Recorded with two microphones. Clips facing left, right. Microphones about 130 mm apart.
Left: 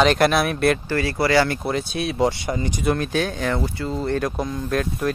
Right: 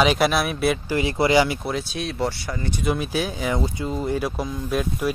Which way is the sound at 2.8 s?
5° right (ahead or behind).